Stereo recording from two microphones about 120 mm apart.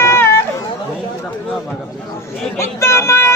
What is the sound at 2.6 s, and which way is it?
Vehicle, 25° left (ahead or behind).